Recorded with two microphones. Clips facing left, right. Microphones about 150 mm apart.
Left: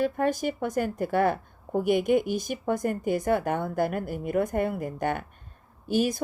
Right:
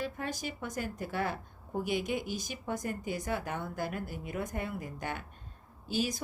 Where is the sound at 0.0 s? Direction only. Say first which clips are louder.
Left 11 dB; 55° left (ahead or behind).